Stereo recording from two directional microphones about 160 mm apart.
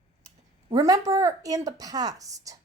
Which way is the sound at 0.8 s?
20° right (ahead or behind).